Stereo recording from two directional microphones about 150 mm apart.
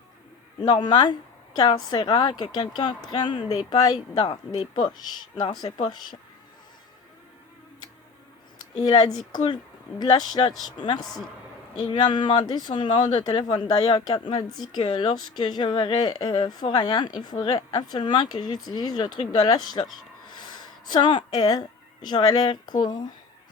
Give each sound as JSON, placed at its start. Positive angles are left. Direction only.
{"t": 0.6, "sound": "speech", "side_deg": 30}
{"t": 8.8, "sound": "speech", "side_deg": 25}
{"t": 11.0, "sound": "speech", "side_deg": 0}
{"t": 11.8, "sound": "speech", "side_deg": 30}
{"t": 20.2, "sound": "a sound", "side_deg": 30}
{"t": 22.8, "sound": "speech", "side_deg": 30}